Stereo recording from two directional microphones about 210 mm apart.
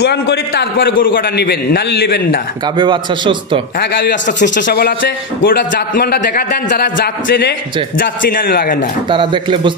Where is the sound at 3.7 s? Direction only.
55° left (ahead or behind).